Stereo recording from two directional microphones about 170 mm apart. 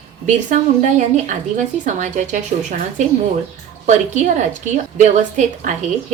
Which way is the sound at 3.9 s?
45° right (ahead or behind).